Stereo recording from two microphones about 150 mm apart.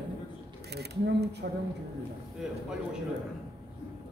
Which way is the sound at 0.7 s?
90° right.